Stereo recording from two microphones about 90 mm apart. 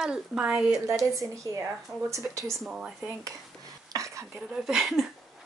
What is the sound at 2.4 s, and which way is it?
Speech, centre (ahead or behind).